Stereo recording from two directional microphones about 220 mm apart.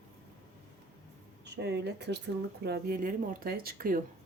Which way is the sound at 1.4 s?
50° right (ahead or behind).